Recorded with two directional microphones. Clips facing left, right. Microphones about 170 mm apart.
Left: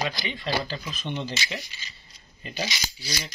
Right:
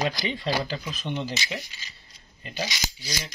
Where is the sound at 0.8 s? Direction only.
5° right (ahead or behind).